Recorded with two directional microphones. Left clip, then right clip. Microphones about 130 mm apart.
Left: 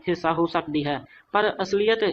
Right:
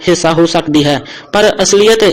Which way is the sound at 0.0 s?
35° right (ahead or behind).